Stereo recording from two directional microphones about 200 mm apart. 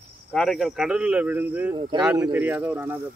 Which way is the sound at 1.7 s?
25° right (ahead or behind).